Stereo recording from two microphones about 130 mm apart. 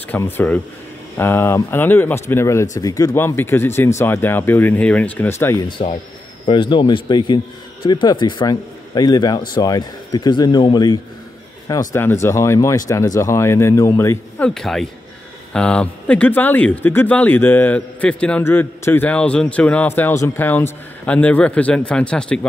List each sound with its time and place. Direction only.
0.1 s speech: 15° left (ahead or behind)
3.2 s speech: 15° left (ahead or behind)
5.6 s a man's voice: 40° left (ahead or behind)
11.9 s speech: 20° left (ahead or behind)
14.4 s speech: 5° left (ahead or behind)